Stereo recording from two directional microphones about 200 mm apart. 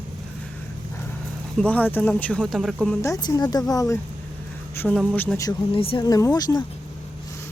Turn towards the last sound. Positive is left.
turn(degrees=15)  # may be behind; listen again after turning